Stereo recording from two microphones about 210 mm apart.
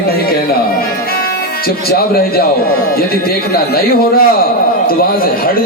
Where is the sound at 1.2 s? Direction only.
45° left (ahead or behind).